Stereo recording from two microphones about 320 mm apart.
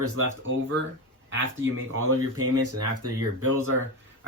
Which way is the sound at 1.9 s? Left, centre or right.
Right.